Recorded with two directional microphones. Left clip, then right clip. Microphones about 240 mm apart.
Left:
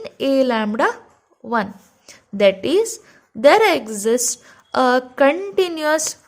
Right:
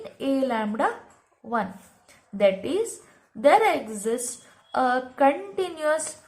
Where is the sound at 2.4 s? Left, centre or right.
Left.